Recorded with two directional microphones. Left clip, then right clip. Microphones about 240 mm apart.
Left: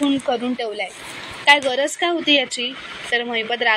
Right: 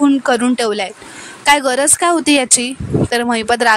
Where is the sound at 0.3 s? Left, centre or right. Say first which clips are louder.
Right 8 dB; right.